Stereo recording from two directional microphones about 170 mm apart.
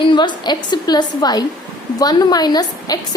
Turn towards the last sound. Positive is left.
turn(degrees=25)  # may be behind; listen again after turning